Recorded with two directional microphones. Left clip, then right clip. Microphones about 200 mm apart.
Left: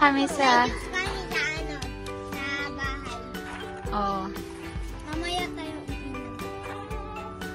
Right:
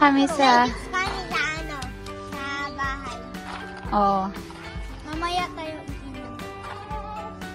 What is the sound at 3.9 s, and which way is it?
Speech, 30° right (ahead or behind).